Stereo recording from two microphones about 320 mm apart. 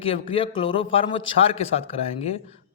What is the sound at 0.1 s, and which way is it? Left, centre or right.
A man's voice, centre.